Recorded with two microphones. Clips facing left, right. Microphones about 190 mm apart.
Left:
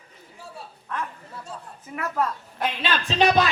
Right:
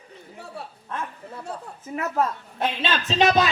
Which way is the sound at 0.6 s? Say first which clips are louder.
Right 5 dB; 65° right (ahead or behind).